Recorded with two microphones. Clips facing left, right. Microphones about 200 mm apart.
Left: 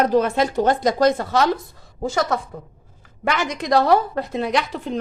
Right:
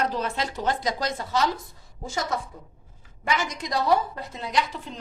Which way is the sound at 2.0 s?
75° left (ahead or behind).